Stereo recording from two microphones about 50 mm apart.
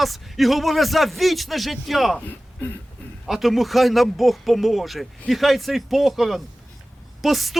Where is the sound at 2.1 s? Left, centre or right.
Left.